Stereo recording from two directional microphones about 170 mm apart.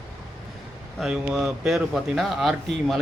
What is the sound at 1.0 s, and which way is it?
Speech, 5° right (ahead or behind).